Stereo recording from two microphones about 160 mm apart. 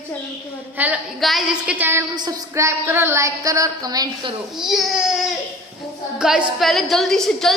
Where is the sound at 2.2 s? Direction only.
25° right (ahead or behind).